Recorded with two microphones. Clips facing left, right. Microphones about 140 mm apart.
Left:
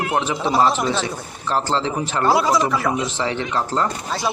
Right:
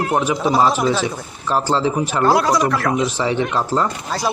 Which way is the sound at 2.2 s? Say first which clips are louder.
Right 1 dB; centre (ahead or behind).